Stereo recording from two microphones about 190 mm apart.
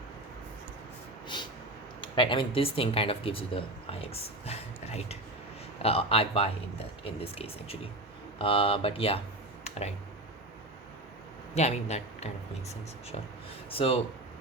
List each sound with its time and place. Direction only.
2.0 s speech: 25° left (ahead or behind)
9.6 s a sound: 35° left (ahead or behind)
11.5 s speech: 35° left (ahead or behind)